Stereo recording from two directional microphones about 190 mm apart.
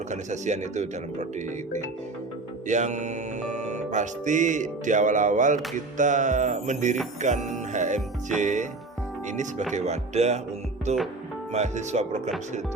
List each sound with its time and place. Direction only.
0.1 s speech: 40° right (ahead or behind)
2.6 s speech: 40° right (ahead or behind)
7.2 s music: 40° right (ahead or behind)
8.4 s speech: 40° right (ahead or behind)